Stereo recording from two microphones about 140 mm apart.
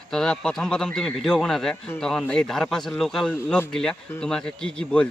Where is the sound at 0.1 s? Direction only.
5° left (ahead or behind).